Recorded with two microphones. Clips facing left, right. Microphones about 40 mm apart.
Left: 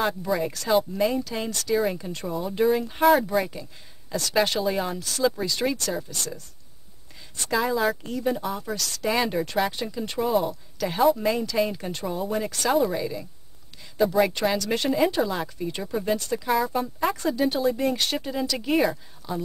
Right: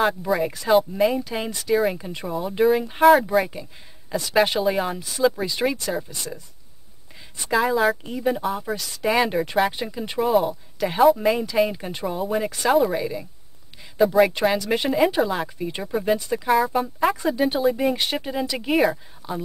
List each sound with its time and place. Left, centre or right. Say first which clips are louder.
0.2 s speech: right 3 dB; centre
7.5 s speech: right 4 dB; centre
10.2 s speech: right 4 dB; centre
10.5 s speech: right 3 dB; centre
16.4 s speech: right 5 dB; centre
18.7 s speech: right 3 dB; centre
19.2 s speech: right 1 dB; centre